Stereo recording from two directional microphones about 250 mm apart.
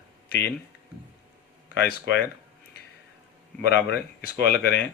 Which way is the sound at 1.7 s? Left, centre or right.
Left.